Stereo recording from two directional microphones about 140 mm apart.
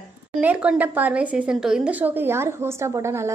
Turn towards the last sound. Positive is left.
turn(degrees=-20)  # may be behind; listen again after turning